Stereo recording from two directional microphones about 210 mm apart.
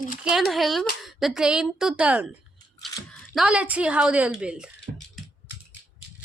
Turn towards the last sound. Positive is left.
turn(degrees=-5)  # may be behind; listen again after turning